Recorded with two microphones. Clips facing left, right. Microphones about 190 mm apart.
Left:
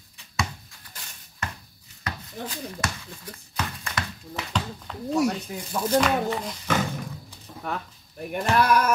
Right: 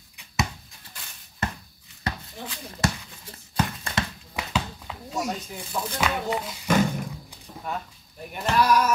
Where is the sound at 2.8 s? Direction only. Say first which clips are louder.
Right 5 dB; 30° right (ahead or behind).